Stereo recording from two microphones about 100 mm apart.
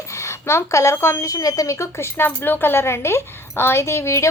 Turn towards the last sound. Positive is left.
turn(degrees=30)  # may be behind; listen again after turning